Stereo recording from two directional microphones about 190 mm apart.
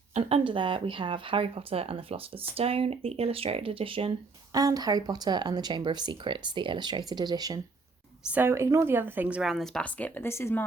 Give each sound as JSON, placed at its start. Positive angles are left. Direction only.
{"t": 0.1, "sound": "speech", "side_deg": -35}